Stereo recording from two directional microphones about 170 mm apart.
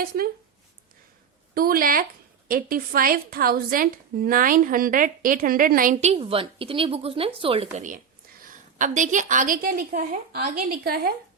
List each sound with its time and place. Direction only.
1.5 s a woman's voice: 60° right (ahead or behind)